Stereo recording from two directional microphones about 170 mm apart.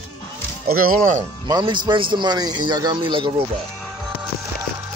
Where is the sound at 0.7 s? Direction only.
55° right (ahead or behind).